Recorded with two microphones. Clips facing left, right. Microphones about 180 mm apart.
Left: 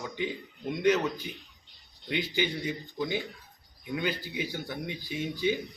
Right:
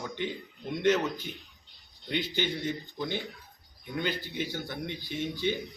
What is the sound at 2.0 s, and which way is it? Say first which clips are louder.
A man's voice: left 1 dB; 5° left (ahead or behind).